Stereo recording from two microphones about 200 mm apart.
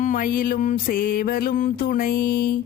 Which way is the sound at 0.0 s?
40° left (ahead or behind).